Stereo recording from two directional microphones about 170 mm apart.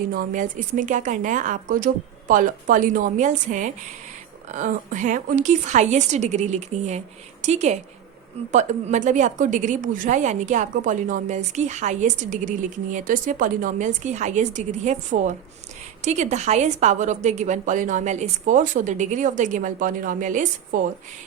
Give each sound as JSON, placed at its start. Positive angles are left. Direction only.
{"t": 0.1, "sound": "a woman's voice", "side_deg": -50}